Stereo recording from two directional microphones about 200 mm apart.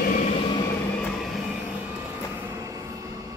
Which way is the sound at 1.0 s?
Centre (ahead or behind).